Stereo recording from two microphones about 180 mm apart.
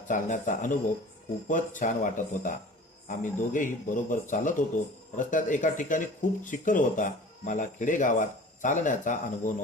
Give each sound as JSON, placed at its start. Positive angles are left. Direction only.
{"t": 0.1, "sound": "speech", "side_deg": 45}